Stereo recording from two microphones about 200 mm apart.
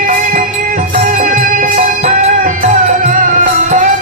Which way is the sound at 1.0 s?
40° right (ahead or behind).